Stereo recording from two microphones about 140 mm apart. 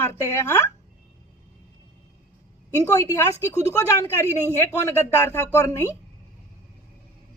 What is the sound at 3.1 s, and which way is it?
A woman's voice, 20° left (ahead or behind).